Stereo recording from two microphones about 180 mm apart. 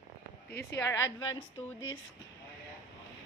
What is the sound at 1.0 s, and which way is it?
Speech, 90° left.